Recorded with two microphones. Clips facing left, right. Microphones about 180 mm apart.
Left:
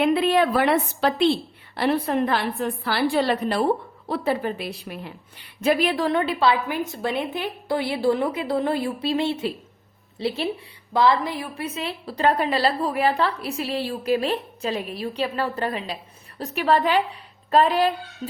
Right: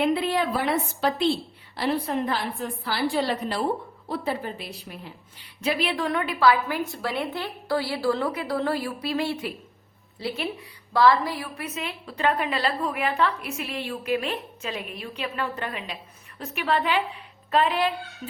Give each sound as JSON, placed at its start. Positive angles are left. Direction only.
{"t": 0.0, "sound": "a woman's voice", "side_deg": 65}
{"t": 1.7, "sound": "a woman's voice", "side_deg": 60}
{"t": 5.6, "sound": "speech", "side_deg": 50}
{"t": 6.1, "sound": "a woman's voice", "side_deg": 30}
{"t": 18.2, "sound": "music", "side_deg": 30}